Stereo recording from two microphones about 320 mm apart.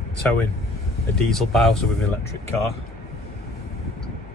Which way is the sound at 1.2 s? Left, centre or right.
Centre.